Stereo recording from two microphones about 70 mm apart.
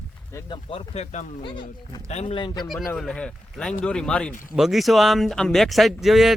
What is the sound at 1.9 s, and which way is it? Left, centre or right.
Speech, left.